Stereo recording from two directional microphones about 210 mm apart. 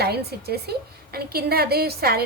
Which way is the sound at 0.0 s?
50° right (ahead or behind).